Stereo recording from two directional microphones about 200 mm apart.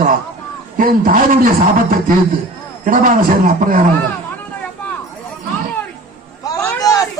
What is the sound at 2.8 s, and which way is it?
A man's voice, 40° right (ahead or behind).